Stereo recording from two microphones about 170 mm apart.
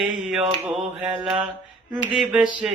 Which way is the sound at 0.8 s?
Centre (ahead or behind).